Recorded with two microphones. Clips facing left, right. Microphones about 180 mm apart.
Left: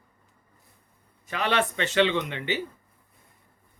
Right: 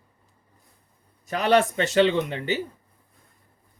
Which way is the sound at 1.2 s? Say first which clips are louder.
Right 6 dB; 40° right (ahead or behind).